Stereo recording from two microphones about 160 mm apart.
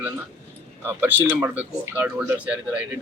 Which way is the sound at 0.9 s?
10° right (ahead or behind).